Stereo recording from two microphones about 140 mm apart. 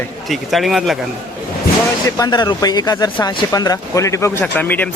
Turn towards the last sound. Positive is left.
turn(degrees=10)  # may be behind; listen again after turning